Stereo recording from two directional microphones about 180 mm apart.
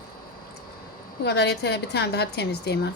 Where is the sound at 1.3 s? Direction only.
65° left (ahead or behind).